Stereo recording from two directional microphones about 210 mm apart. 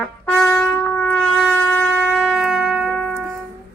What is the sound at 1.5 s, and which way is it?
Shofar, 5° left (ahead or behind).